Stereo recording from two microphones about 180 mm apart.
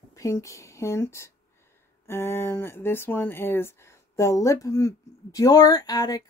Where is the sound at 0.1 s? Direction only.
15° left (ahead or behind).